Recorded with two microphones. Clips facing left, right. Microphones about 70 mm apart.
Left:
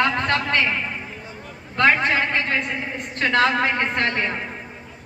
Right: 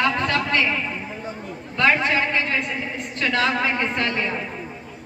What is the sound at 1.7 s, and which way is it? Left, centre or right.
A woman's voice, left.